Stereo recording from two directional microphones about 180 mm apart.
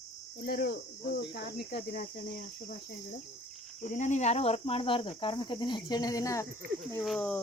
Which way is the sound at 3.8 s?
40° left (ahead or behind).